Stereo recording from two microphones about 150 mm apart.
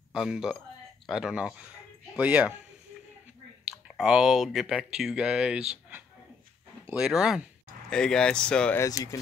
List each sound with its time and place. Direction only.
0.1 s speech: 5° right (ahead or behind)
3.6 s speech: 5° right (ahead or behind)
8.8 s speech: 20° left (ahead or behind)